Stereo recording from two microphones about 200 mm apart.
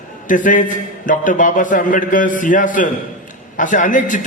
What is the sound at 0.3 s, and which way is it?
Speech, 40° left (ahead or behind).